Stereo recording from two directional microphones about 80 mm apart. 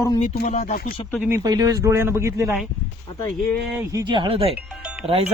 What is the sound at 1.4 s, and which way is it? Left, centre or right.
Speech, right.